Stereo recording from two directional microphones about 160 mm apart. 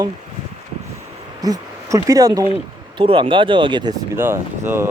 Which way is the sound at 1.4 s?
20° right (ahead or behind).